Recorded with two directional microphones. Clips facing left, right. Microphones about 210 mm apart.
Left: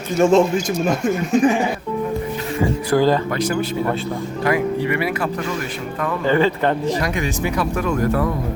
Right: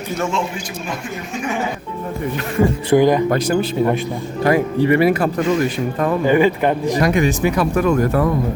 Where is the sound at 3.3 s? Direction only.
40° right (ahead or behind).